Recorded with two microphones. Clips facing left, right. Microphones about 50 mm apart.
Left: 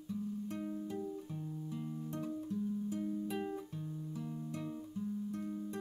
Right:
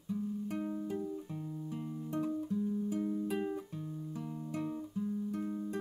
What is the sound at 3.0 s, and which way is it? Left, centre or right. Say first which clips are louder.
Music: right 3 dB; right.